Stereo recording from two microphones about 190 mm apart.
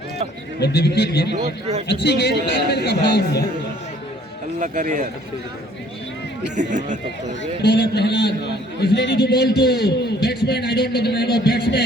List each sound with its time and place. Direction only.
0.6 s a man's voice: 60° left (ahead or behind)
4.6 s speech: 40° right (ahead or behind)
6.6 s speech: 40° right (ahead or behind)
7.6 s a man's voice: 60° left (ahead or behind)